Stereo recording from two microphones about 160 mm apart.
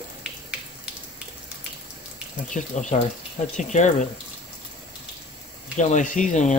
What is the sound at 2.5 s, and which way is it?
Speech, 50° left (ahead or behind).